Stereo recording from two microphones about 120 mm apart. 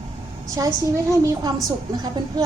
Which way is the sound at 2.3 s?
35° right (ahead or behind).